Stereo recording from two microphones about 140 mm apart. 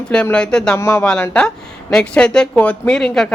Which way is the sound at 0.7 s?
20° left (ahead or behind).